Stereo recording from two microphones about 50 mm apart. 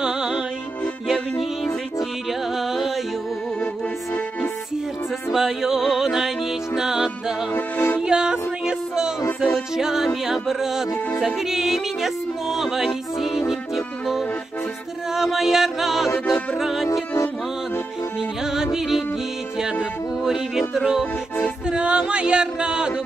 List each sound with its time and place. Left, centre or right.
0.0 s music: centre
2.5 s music: centre
5.3 s music: centre
7.5 s music: left
8.0 s music: centre
15.1 s music: centre
18.4 s music: centre
21.6 s music: centre